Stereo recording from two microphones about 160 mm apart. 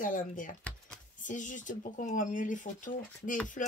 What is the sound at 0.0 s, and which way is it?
Speech, 55° left (ahead or behind).